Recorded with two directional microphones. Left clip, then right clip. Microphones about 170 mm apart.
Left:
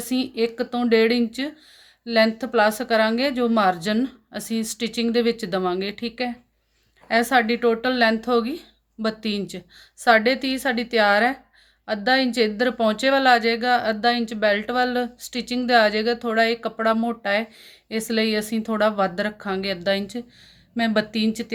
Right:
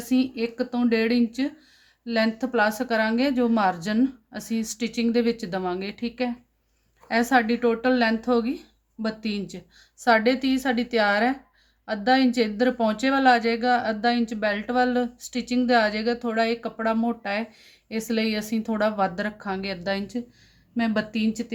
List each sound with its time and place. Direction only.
0.0 s speech: 35° left (ahead or behind)